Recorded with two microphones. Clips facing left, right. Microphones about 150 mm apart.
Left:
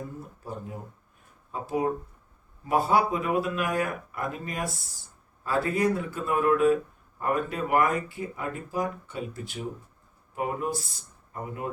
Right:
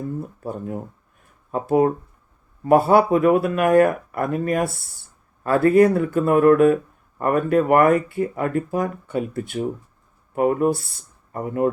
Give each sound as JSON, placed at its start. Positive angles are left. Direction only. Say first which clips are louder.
{"t": 1.5, "sound": "speech", "louder": "right 9 dB", "side_deg": -60}